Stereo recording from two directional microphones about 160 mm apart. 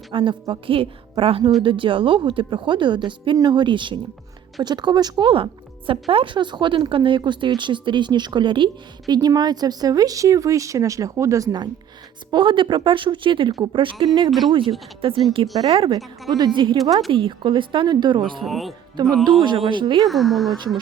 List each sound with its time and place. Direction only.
0.1 s speech: 30° right (ahead or behind)
14.3 s speech: centre (ahead or behind)
15.0 s speech: 35° right (ahead or behind)
18.4 s speech: centre (ahead or behind)
19.0 s speech: 30° right (ahead or behind)
20.1 s speech: centre (ahead or behind)